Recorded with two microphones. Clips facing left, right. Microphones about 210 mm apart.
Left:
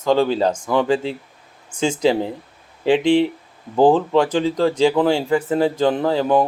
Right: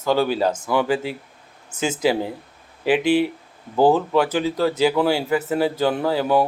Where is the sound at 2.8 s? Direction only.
25° left (ahead or behind).